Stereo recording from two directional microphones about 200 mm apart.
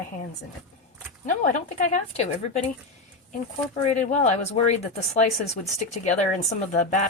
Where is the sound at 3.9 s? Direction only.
35° left (ahead or behind).